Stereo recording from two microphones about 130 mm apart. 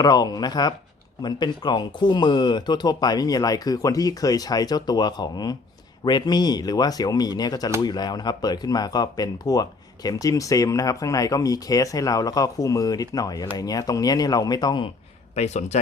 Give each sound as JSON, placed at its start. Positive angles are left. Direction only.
{"t": 0.0, "sound": "speech", "side_deg": 30}
{"t": 15.4, "sound": "speech", "side_deg": 60}